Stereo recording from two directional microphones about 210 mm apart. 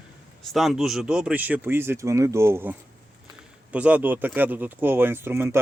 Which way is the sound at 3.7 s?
5° right (ahead or behind).